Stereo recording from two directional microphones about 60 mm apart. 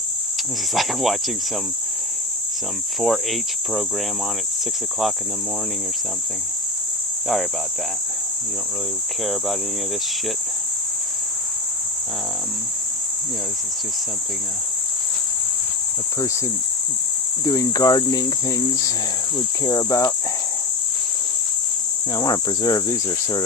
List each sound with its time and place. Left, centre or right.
0.7 s cricket: centre
3.0 s cricket: centre
9.2 s cricket: centre
17.4 s cricket: left
22.1 s cricket: left